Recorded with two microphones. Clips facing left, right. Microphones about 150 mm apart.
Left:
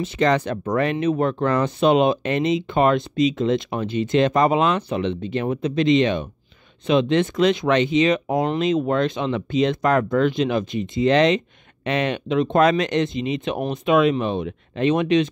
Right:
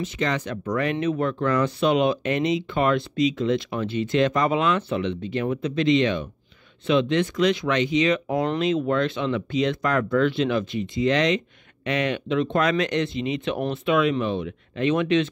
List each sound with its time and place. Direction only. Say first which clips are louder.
0.0 s speech: left 6 dB; 35° left (ahead or behind); by 15.2 s 20° left (ahead or behind)